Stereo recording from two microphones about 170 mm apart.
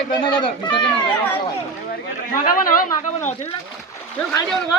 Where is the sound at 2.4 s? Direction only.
55° left (ahead or behind).